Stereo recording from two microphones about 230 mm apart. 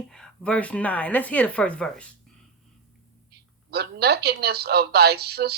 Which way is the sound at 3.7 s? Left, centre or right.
Right.